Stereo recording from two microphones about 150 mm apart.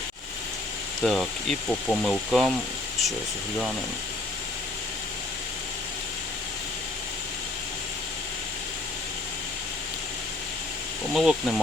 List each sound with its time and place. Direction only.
1.0 s speech: centre (ahead or behind)
11.1 s speech: centre (ahead or behind)